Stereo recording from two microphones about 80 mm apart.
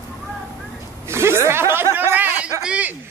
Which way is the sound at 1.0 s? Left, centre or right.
Right.